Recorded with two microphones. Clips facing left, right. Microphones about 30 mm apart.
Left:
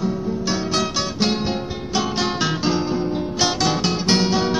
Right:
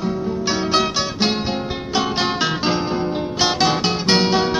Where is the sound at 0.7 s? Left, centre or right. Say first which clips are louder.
Right 3 dB; centre.